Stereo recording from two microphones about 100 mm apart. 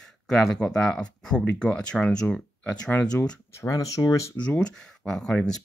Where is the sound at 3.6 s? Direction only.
35° left (ahead or behind).